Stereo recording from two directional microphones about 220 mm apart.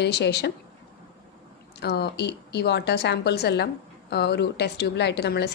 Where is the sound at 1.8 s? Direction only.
50° left (ahead or behind).